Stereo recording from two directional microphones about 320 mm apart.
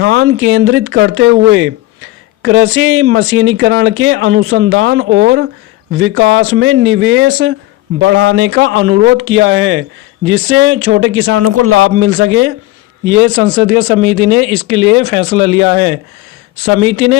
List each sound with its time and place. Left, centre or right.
0.0 s speech: right